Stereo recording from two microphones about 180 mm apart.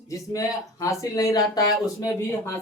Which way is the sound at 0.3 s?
20° left (ahead or behind).